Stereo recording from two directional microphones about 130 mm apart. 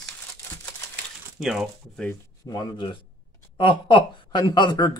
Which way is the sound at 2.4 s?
30° left (ahead or behind).